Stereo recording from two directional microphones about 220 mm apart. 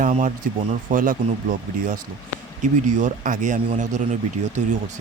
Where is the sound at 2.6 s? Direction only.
35° right (ahead or behind).